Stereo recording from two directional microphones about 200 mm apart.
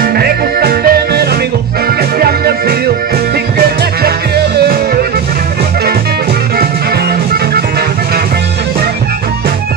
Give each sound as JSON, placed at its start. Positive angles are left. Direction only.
{"t": 0.0, "sound": "music", "side_deg": -50}